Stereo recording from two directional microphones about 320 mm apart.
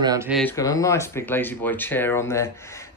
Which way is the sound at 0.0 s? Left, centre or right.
Centre.